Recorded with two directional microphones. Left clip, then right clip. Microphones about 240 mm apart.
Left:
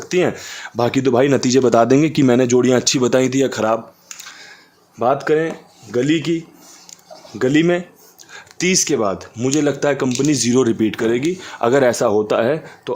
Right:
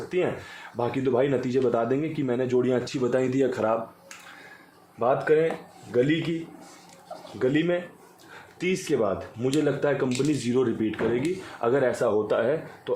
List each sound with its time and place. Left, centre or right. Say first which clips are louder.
0.8 s speech: left 9 dB; left
4.9 s speech: left 6 dB; left
7.3 s speech: left 9 dB; left